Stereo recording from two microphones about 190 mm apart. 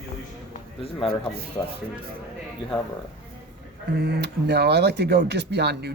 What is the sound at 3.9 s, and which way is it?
Speech, 60° right (ahead or behind).